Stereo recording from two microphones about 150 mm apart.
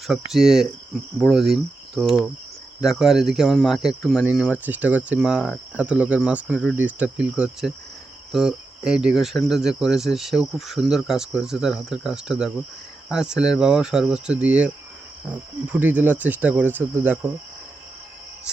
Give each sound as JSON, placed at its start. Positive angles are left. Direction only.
{"t": 0.1, "sound": "speech", "side_deg": 0}
{"t": 1.3, "sound": "cricket", "side_deg": 0}
{"t": 2.8, "sound": "speech", "side_deg": 0}
{"t": 4.3, "sound": "cricket", "side_deg": -10}
{"t": 8.3, "sound": "speech", "side_deg": -5}
{"t": 15.3, "sound": "cricket", "side_deg": -10}